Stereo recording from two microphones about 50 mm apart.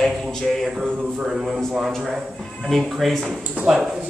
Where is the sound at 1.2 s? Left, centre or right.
Centre.